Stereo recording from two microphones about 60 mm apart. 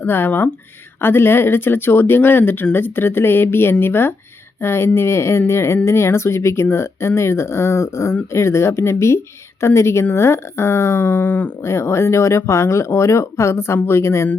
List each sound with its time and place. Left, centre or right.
0.0 s speech: left
11.0 s speech: left
11.6 s speech: left